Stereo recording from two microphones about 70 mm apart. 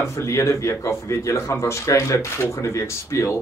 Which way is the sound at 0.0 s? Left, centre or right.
Left.